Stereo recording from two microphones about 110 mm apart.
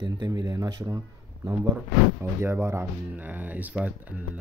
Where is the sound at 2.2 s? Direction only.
25° right (ahead or behind).